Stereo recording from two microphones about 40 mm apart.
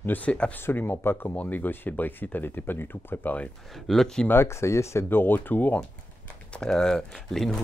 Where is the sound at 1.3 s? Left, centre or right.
Left.